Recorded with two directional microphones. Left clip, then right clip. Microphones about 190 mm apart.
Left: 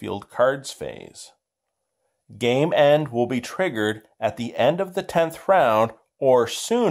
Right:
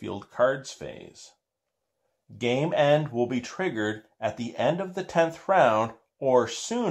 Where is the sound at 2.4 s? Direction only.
50° left (ahead or behind).